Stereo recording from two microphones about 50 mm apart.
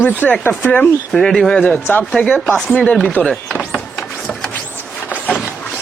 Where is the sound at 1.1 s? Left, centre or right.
Centre.